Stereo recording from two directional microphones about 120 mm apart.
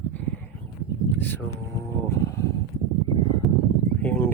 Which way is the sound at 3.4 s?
Centre (ahead or behind).